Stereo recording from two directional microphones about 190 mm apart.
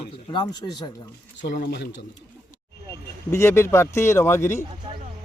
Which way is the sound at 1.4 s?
65° left (ahead or behind).